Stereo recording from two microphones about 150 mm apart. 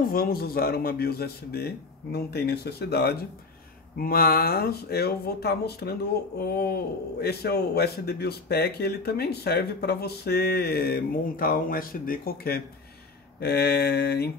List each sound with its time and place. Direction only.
0.0 s a man's voice: 75° left (ahead or behind); by 14.3 s 90° left